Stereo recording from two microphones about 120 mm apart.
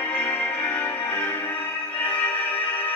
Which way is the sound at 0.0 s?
15° left (ahead or behind).